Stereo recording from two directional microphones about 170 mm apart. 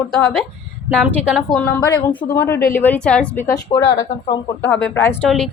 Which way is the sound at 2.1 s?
10° left (ahead or behind).